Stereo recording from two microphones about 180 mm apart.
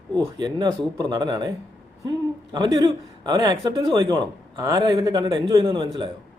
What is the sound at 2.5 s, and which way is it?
A man's voice, 20° right (ahead or behind).